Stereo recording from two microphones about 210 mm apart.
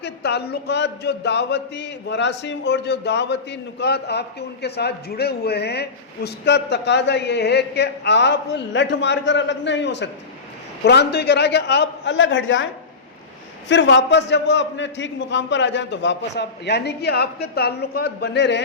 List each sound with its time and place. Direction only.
0.0 s a man's voice: 50° left (ahead or behind)
13.7 s a man's voice: 60° left (ahead or behind)